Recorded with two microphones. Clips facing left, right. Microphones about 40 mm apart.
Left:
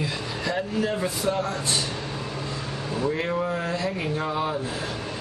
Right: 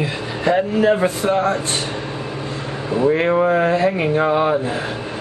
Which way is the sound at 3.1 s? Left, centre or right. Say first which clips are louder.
Right 11 dB; right.